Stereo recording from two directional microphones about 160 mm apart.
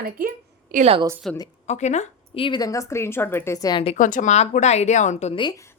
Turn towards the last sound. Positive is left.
turn(degrees=30)  # may be behind; listen again after turning